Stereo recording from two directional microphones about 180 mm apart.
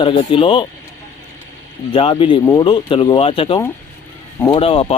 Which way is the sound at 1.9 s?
30° left (ahead or behind).